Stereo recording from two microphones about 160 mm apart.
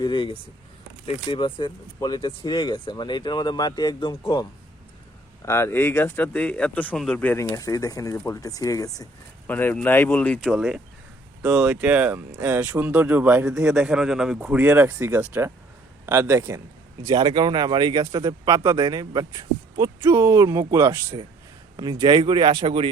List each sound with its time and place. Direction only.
0.0 s speech: 30° left (ahead or behind)
5.5 s speech: 15° left (ahead or behind)
9.5 s speech: 10° left (ahead or behind)
11.6 s speech: 10° right (ahead or behind); by 22.9 s 35° right (ahead or behind)